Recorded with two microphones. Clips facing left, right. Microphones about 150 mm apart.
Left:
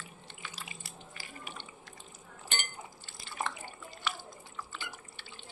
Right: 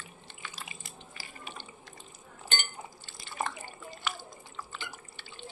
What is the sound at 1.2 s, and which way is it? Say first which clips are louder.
Water: right 1 dB; 35° right (ahead or behind).